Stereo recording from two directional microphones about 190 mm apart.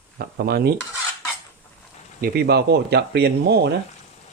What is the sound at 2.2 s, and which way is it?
Speech, 60° right (ahead or behind).